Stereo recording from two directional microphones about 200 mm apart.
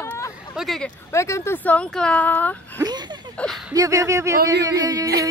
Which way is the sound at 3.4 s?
Centre (ahead or behind).